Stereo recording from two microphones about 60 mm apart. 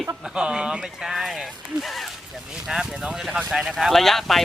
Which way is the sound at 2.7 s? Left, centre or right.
Centre.